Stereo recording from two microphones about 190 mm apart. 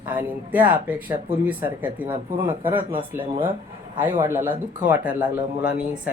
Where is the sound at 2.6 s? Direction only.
25° right (ahead or behind).